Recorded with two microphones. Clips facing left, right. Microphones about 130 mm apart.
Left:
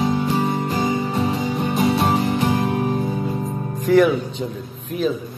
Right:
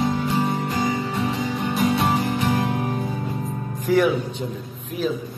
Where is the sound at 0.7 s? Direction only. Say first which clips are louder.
Left 2 dB; 25° left (ahead or behind).